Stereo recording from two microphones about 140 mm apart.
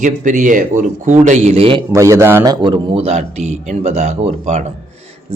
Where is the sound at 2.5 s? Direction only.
35° right (ahead or behind); by 4.6 s 55° right (ahead or behind).